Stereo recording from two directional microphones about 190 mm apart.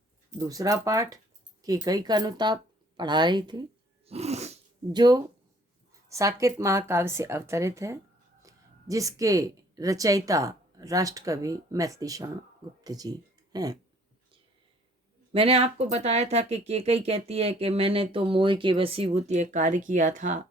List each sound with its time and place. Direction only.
0.3 s speech: 20° right (ahead or behind)
3.0 s a sound: 25° right (ahead or behind)
4.9 s speech: 20° right (ahead or behind)
15.3 s speech: 30° right (ahead or behind)